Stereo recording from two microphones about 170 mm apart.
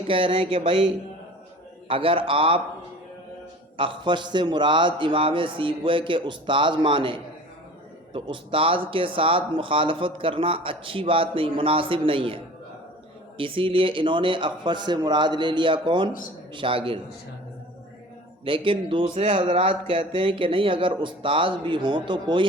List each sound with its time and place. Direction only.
0.1 s speech: 30° right (ahead or behind)
1.9 s speech: 30° right (ahead or behind)
3.8 s a man's voice: 30° right (ahead or behind)
18.4 s speech: 30° right (ahead or behind)